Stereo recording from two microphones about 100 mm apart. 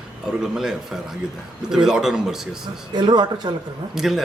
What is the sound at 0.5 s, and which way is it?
A man's voice, 5° right (ahead or behind).